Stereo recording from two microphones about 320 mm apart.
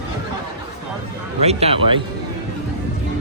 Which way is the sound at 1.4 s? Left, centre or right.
Centre.